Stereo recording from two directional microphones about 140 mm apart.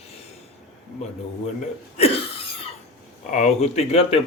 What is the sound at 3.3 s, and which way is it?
Speech, 55° left (ahead or behind).